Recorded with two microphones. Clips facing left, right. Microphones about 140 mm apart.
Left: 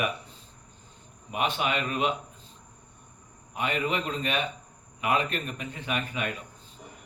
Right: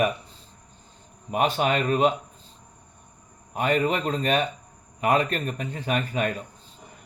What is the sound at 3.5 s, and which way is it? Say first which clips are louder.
Speech: right 6 dB; 40° right (ahead or behind).